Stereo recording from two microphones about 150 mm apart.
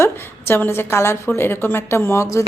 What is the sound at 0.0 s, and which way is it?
A woman's voice, 15° left (ahead or behind).